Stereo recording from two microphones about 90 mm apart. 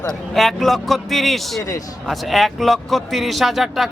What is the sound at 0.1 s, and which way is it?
Speech, centre (ahead or behind).